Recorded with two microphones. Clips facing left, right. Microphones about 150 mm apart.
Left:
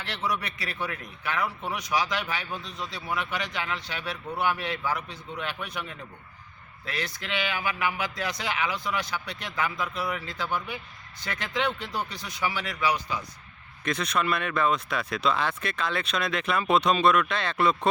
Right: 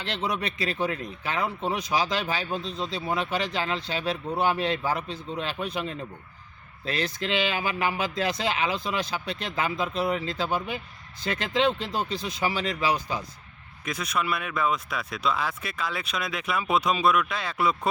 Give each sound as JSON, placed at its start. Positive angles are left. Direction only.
{"t": 0.0, "sound": "speech", "side_deg": -25}
{"t": 13.8, "sound": "speech", "side_deg": -5}